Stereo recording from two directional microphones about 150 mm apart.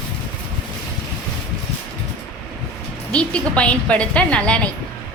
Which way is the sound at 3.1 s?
5° left (ahead or behind).